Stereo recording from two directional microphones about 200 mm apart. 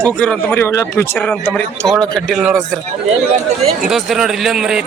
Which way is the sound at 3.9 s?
Centre (ahead or behind).